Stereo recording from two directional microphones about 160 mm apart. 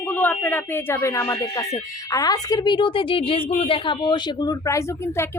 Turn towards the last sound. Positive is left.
turn(degrees=15)  # may be behind; listen again after turning